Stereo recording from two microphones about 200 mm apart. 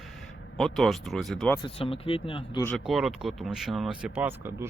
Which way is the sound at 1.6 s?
30° left (ahead or behind).